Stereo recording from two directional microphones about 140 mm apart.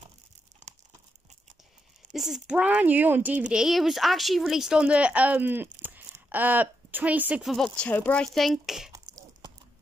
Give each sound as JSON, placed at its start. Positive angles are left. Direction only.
{"t": 2.1, "sound": "speech", "side_deg": -5}
{"t": 7.5, "sound": "speech", "side_deg": 5}
{"t": 8.9, "sound": "a sound", "side_deg": -25}